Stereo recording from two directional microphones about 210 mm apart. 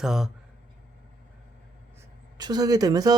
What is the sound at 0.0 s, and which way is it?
Speech, centre (ahead or behind).